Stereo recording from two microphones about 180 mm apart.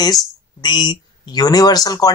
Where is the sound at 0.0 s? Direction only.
25° left (ahead or behind).